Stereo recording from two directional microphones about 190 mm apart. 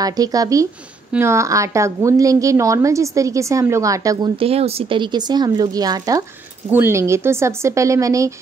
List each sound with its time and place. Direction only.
0.0 s a woman's voice: 20° right (ahead or behind)
4.4 s a woman's voice: 30° right (ahead or behind)